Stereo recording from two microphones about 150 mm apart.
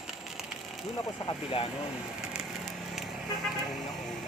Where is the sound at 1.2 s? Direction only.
40° left (ahead or behind).